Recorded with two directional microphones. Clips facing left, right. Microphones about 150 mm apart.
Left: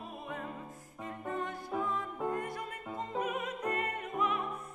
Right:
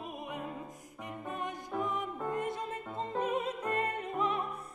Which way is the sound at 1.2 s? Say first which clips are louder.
Left 2 dB; 15° right (ahead or behind).